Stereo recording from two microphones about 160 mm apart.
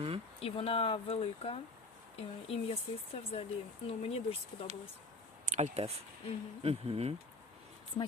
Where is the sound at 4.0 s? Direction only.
40° left (ahead or behind).